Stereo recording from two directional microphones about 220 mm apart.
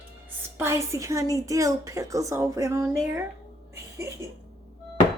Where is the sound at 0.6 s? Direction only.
15° right (ahead or behind).